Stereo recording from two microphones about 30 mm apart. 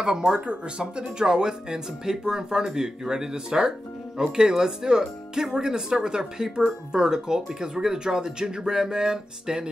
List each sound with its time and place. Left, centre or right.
0.0 s speech: right